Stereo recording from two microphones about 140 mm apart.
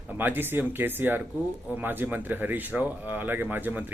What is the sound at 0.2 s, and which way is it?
Speech, 15° right (ahead or behind).